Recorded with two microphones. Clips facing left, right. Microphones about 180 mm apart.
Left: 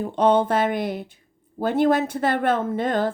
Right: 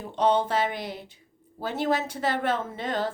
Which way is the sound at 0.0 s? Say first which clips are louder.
Left 5 dB; 50° left (ahead or behind).